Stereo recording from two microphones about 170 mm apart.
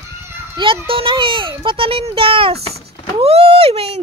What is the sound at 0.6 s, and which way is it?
Speech, 30° right (ahead or behind).